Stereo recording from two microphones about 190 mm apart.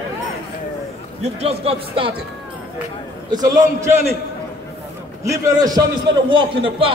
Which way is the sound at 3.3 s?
20° right (ahead or behind).